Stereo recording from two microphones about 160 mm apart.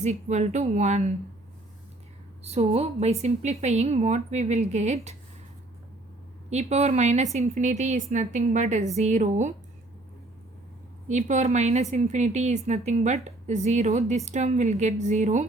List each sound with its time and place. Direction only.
0.0 s a woman's voice: 45° right (ahead or behind)
2.4 s a woman's voice: 40° right (ahead or behind)
6.5 s a woman's voice: 45° right (ahead or behind)
11.1 s a woman's voice: 50° right (ahead or behind)